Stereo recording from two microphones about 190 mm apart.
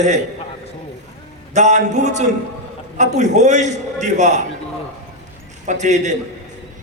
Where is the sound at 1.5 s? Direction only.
40° right (ahead or behind).